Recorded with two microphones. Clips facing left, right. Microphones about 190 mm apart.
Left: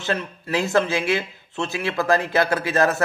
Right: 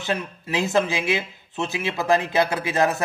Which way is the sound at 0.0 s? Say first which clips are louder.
Left 1 dB; 15° right (ahead or behind).